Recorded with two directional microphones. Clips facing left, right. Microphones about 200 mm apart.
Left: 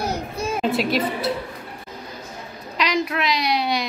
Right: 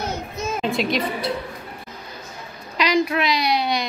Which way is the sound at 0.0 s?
35° left (ahead or behind).